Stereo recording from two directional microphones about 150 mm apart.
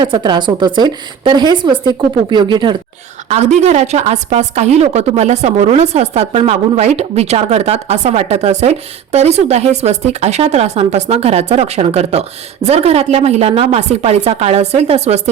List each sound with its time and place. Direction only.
0.0 s a woman's voice: 30° right (ahead or behind)
3.2 s a woman's voice: 50° right (ahead or behind)